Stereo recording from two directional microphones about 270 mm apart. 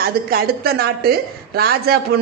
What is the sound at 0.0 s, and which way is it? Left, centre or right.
A woman's voice, right.